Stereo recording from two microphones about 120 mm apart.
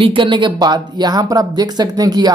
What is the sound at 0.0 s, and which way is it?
Speech, 45° right (ahead or behind).